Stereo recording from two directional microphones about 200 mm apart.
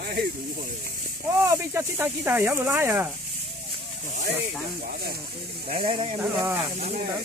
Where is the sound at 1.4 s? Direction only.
15° right (ahead or behind).